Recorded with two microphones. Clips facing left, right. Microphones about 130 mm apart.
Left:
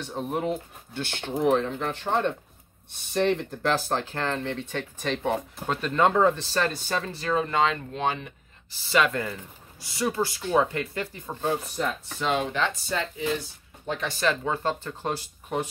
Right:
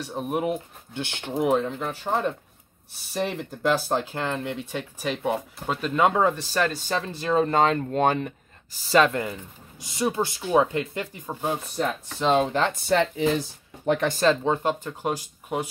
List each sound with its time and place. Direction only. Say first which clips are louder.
0.0 s speech: right 2 dB; 10° right (ahead or behind)
7.2 s speech: right 4 dB; 30° right (ahead or behind); by 8.3 s 50° right (ahead or behind)
8.7 s speech: right 4 dB; 35° right (ahead or behind)
9.1 s speech: right 2 dB; 20° right (ahead or behind)
12.2 s speech: right 5 dB; 35° right (ahead or behind)
12.8 s speech: right 8 dB; 75° right (ahead or behind)
13.8 s speech: right 8 dB; 60° right (ahead or behind)
14.2 s speech: right 3 dB; 25° right (ahead or behind)